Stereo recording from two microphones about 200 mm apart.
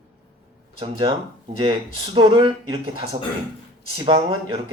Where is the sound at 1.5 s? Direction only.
25° right (ahead or behind).